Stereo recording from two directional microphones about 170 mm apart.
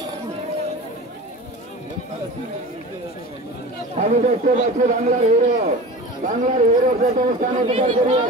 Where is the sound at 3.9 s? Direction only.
45° right (ahead or behind).